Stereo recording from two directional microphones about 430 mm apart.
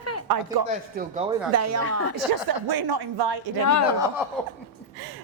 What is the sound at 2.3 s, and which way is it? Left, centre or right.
A woman's voice, right.